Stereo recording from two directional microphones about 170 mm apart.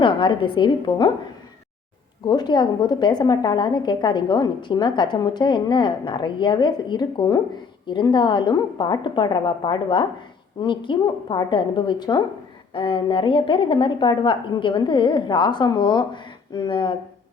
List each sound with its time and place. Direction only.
0.0 s a woman's voice: 30° left (ahead or behind)
2.2 s a woman's voice: 25° left (ahead or behind)